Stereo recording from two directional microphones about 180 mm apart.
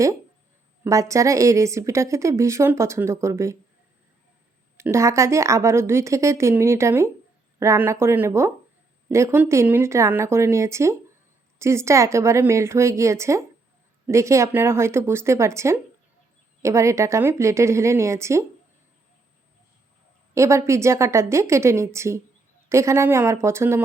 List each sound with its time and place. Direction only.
0.9 s a woman's voice: 15° right (ahead or behind)
4.8 s a woman's voice: 15° right (ahead or behind)
20.3 s a woman's voice: 15° right (ahead or behind)